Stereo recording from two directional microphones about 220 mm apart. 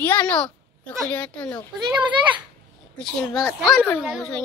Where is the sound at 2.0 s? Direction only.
20° right (ahead or behind).